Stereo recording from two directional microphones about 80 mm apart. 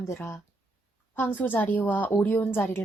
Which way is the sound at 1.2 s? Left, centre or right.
Left.